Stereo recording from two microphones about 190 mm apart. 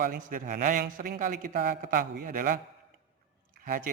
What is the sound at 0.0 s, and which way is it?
Speech, 45° right (ahead or behind).